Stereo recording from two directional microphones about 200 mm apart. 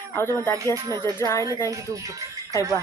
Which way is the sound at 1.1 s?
15° left (ahead or behind).